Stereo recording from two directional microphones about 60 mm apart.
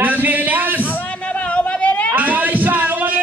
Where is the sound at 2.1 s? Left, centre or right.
Right.